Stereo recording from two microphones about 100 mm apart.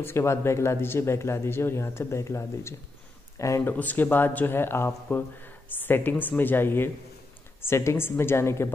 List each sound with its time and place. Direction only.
0.0 s speech: 25° left (ahead or behind)
3.7 s speech: 15° left (ahead or behind)